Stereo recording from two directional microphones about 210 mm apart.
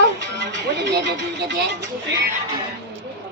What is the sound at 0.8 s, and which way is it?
Speech, 55° right (ahead or behind).